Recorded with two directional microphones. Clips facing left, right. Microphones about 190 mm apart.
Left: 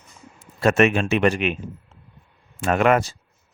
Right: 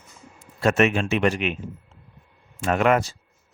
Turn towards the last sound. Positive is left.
turn(degrees=60)  # may be behind; listen again after turning